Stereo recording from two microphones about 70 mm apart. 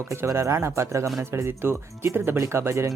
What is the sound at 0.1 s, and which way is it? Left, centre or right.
Speech, right.